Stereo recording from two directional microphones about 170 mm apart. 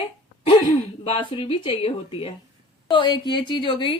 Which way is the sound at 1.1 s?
30° left (ahead or behind).